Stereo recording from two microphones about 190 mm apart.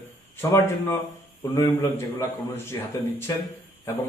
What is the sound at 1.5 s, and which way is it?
Speech, 15° left (ahead or behind).